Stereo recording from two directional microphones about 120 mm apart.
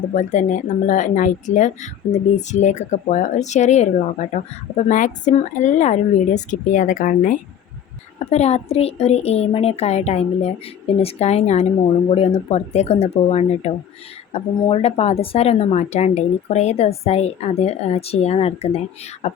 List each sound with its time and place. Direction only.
0.1 s speech: 85° left
4.9 s speech: 90° left
8.3 s speech: 65° left (ahead or behind)
12.1 s speech: 55° left (ahead or behind)